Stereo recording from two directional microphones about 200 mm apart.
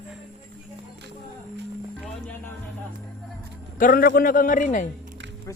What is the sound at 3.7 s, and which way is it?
A man's voice, 45° left (ahead or behind).